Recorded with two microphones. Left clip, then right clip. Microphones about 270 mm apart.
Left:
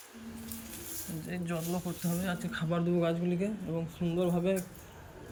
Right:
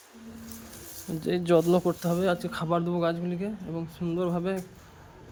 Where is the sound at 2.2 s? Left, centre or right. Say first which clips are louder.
Right 9 dB; centre.